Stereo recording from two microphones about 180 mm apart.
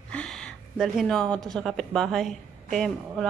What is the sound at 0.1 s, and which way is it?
Speech, 5° left (ahead or behind).